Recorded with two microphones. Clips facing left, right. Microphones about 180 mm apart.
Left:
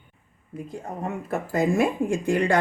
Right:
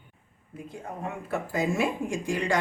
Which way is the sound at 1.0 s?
50° left (ahead or behind).